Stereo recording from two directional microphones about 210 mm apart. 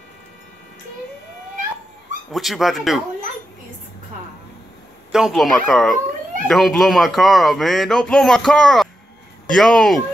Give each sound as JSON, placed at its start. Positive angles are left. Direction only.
{"t": 2.3, "sound": "speech", "side_deg": 0}
{"t": 5.1, "sound": "speech", "side_deg": 0}